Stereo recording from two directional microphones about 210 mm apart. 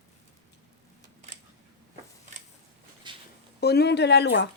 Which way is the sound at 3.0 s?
20° right (ahead or behind).